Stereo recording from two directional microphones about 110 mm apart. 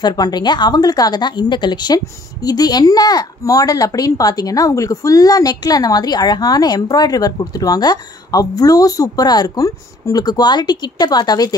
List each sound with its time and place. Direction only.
0.0 s speech: 40° left (ahead or behind)